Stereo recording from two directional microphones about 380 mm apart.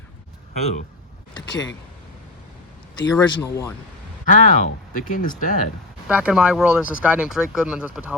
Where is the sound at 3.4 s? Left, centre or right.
Centre.